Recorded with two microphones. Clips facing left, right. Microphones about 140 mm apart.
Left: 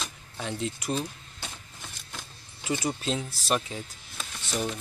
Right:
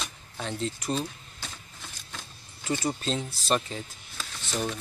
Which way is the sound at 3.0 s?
10° left (ahead or behind).